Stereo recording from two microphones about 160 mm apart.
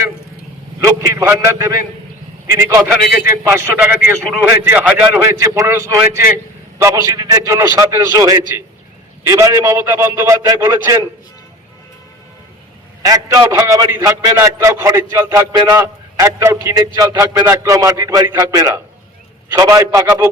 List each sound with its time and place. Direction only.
0.8 s a man's voice: 20° right (ahead or behind)
13.0 s a man's voice: 20° right (ahead or behind)